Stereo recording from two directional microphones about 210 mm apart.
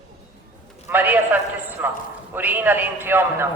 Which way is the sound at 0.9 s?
10° right (ahead or behind).